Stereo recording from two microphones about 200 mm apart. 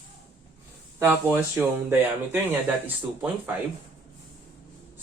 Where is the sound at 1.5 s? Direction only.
10° right (ahead or behind).